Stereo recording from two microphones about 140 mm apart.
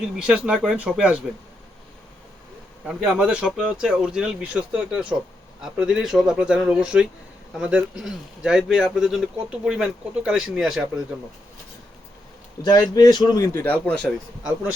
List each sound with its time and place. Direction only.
0.3 s speech: 5° right (ahead or behind)
2.8 s speech: 5° right (ahead or behind)
12.6 s speech: 30° left (ahead or behind); by 14.1 s 10° left (ahead or behind)